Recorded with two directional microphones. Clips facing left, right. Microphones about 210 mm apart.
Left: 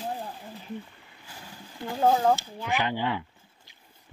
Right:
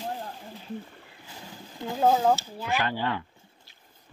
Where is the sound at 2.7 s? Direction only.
15° left (ahead or behind).